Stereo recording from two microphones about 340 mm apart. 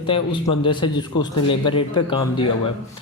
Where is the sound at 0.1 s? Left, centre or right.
Centre.